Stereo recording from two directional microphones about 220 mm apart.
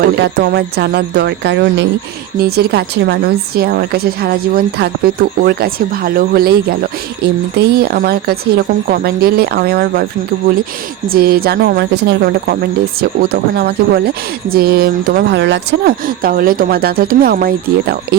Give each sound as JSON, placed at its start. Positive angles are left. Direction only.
{"t": 0.0, "sound": "a woman's voice", "side_deg": -50}
{"t": 11.1, "sound": "a woman's voice", "side_deg": -40}